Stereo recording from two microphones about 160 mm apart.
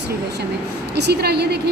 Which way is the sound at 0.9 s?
90° right.